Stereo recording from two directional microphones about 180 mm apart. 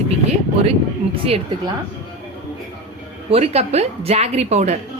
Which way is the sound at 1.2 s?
35° right (ahead or behind).